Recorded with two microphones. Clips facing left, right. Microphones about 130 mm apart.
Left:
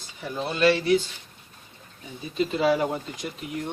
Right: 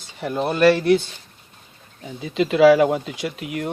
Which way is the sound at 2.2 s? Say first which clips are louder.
Right 9 dB; 85° right.